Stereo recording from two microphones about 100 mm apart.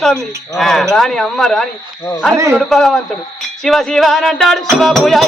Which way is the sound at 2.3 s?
30° right (ahead or behind).